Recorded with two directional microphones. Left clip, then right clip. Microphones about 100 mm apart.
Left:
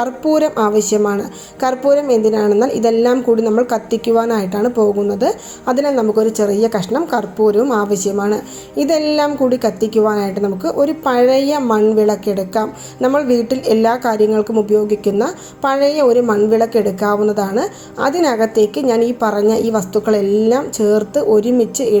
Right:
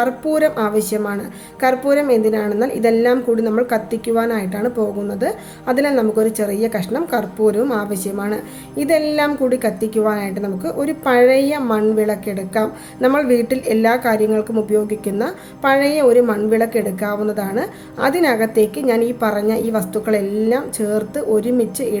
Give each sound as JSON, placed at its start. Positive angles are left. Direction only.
{"t": 0.0, "sound": "a woman's voice", "side_deg": 30}